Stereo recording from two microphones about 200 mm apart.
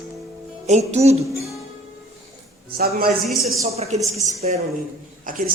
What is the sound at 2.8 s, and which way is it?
Speech, 45° right (ahead or behind).